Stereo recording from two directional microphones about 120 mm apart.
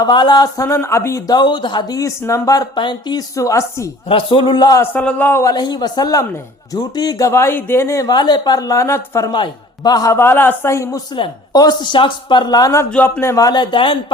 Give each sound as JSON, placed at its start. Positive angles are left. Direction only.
{"t": 0.0, "sound": "speech", "side_deg": 35}
{"t": 1.4, "sound": "speech", "side_deg": 40}
{"t": 3.3, "sound": "speech", "side_deg": 25}
{"t": 4.1, "sound": "a man's voice", "side_deg": 50}
{"t": 4.8, "sound": "speech", "side_deg": 15}
{"t": 9.3, "sound": "a man's voice", "side_deg": 35}
{"t": 10.2, "sound": "speech", "side_deg": 20}
{"t": 11.1, "sound": "speech", "side_deg": 35}
{"t": 12.9, "sound": "speech", "side_deg": 15}